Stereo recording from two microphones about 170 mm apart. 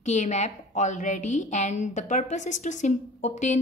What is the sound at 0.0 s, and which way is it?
A woman's voice, 45° left (ahead or behind).